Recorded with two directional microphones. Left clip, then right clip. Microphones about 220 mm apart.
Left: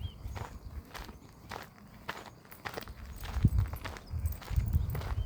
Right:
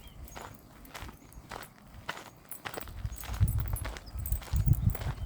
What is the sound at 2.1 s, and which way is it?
Clip-clop, 5° left (ahead or behind).